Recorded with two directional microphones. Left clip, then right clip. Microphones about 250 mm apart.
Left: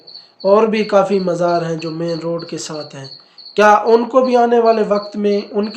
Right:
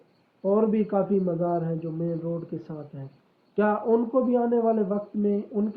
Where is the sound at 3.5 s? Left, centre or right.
Centre.